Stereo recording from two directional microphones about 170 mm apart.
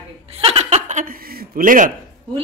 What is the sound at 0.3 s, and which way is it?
Chuckle, 35° right (ahead or behind).